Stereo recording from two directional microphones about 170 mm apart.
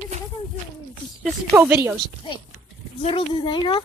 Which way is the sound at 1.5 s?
10° right (ahead or behind).